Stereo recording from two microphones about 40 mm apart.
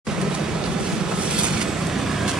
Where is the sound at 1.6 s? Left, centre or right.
Centre.